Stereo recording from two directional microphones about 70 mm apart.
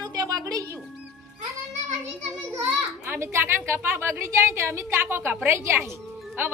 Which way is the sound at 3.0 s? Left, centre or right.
Right.